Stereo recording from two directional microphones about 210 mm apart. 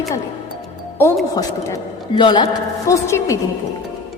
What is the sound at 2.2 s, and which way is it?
A man's voice, 20° left (ahead or behind).